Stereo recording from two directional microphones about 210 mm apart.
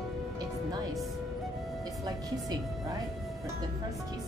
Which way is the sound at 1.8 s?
15° right (ahead or behind).